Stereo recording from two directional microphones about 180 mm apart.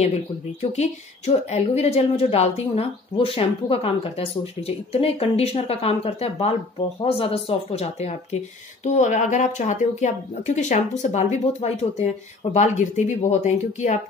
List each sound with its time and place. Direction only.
0.6 s a woman's voice: 35° left (ahead or behind)